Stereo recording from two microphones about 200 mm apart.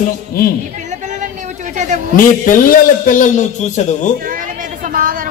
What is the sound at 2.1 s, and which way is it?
A man's voice, 45° left (ahead or behind).